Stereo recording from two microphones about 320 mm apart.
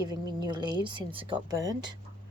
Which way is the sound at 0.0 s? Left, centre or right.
Centre.